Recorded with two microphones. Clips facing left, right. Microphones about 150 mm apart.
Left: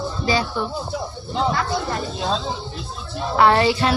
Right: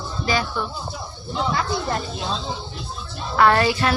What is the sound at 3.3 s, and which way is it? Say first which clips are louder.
Speech: left 1 dB; 20° left (ahead or behind).